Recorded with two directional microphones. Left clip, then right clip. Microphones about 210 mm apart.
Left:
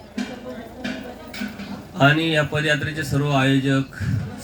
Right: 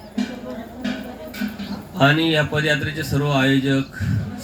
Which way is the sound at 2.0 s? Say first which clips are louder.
Right 1 dB; 25° left (ahead or behind).